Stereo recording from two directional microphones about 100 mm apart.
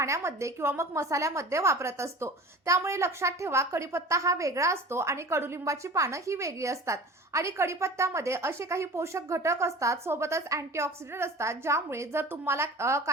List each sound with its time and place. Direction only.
0.0 s a woman's voice: 30° right (ahead or behind)